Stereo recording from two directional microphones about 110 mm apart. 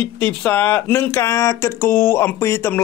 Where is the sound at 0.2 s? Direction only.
15° left (ahead or behind).